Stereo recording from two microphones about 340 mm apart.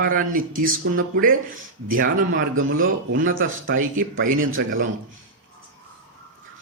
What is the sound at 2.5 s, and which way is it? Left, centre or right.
A man's voice, right.